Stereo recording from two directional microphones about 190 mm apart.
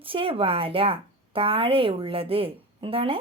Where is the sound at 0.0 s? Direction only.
30° right (ahead or behind).